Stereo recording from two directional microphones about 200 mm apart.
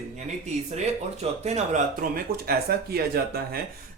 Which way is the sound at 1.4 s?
35° right (ahead or behind).